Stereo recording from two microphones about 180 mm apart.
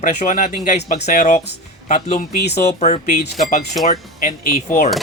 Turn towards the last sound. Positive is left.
turn(degrees=45)  # may be behind; listen again after turning